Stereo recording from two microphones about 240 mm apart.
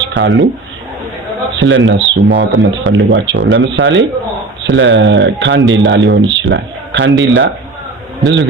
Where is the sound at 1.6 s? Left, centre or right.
Right.